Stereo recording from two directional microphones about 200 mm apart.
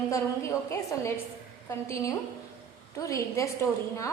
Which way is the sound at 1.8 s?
15° left (ahead or behind).